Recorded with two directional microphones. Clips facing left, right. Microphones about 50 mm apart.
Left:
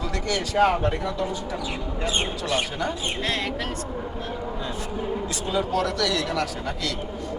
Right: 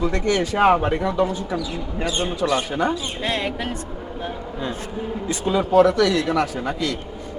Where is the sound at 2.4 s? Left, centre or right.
Right.